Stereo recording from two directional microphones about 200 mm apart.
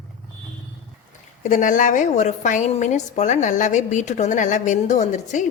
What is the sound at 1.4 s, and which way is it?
A woman's voice, 40° left (ahead or behind).